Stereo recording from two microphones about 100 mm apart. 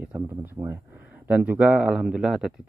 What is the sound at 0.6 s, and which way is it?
Speech, 35° right (ahead or behind).